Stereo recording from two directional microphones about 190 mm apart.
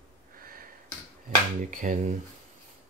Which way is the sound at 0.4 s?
50° right (ahead or behind).